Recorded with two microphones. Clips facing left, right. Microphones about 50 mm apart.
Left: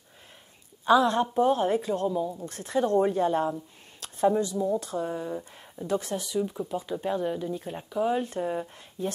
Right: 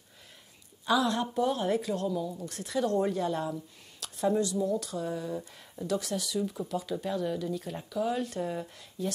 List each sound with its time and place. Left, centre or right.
0.8 s a woman's voice: left